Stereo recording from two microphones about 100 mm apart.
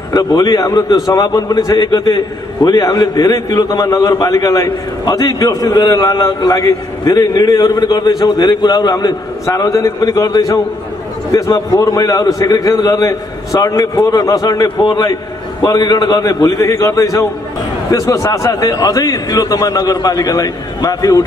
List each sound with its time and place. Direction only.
0.1 s a man's voice: 40° left (ahead or behind)
14.8 s a man's voice: 50° left (ahead or behind)
15.6 s a man's voice: 40° left (ahead or behind)